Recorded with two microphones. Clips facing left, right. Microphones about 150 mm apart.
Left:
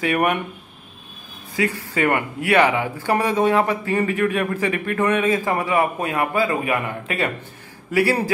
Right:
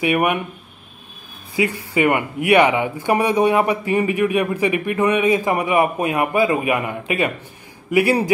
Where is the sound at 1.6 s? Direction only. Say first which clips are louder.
Right 3 dB; 15° right (ahead or behind).